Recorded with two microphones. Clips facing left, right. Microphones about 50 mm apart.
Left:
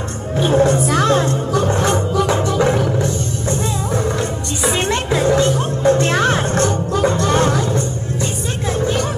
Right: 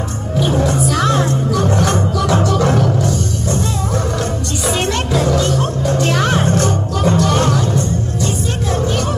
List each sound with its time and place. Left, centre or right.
0.4 s music: left
4.6 s music: left